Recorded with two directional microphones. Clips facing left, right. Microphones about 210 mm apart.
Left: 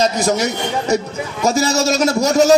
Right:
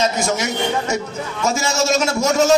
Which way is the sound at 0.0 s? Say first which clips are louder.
Left 3 dB; 35° left (ahead or behind).